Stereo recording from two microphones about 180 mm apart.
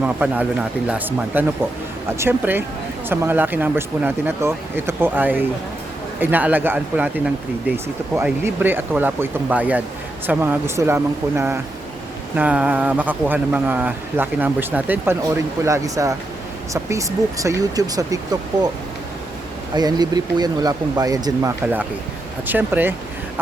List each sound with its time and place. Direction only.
0.0 s speech: 5° right (ahead or behind)
8.1 s speech: 15° right (ahead or behind)
19.7 s speech: 20° right (ahead or behind)
21.6 s speech: 10° right (ahead or behind)